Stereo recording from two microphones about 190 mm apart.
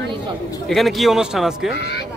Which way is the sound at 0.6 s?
Centre (ahead or behind).